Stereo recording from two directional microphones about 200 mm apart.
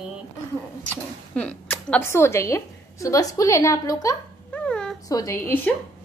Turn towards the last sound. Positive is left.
turn(degrees=10)  # may be behind; listen again after turning